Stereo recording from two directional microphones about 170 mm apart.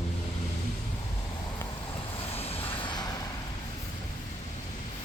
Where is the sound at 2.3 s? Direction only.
35° left (ahead or behind).